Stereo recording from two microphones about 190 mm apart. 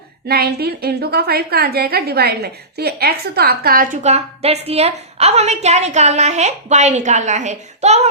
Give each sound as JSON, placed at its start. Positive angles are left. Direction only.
{"t": 0.3, "sound": "a woman's voice", "side_deg": -55}
{"t": 4.0, "sound": "a woman's voice", "side_deg": -35}